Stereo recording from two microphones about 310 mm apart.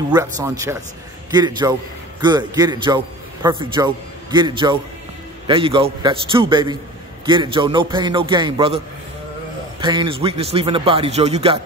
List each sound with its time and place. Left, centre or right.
0.1 s a man's voice: centre